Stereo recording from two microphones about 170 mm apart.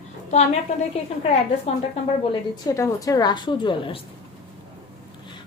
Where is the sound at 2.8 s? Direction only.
20° left (ahead or behind).